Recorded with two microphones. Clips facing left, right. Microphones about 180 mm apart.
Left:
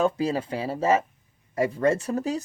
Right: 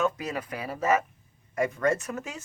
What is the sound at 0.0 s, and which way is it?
Speech, 30° left (ahead or behind).